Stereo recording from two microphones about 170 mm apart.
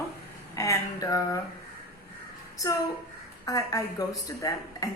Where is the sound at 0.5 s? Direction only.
15° left (ahead or behind).